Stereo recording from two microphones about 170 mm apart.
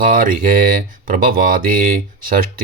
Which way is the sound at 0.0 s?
55° right (ahead or behind).